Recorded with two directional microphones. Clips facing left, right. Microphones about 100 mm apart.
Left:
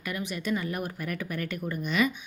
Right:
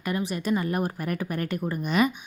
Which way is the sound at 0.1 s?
35° right (ahead or behind).